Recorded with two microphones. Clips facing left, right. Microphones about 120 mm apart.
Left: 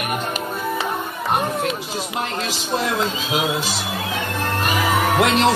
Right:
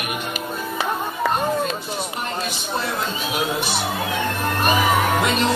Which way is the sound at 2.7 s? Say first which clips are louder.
Left 5 dB; 90° left.